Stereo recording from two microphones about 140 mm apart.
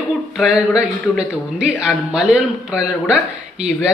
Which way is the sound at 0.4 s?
5° right (ahead or behind).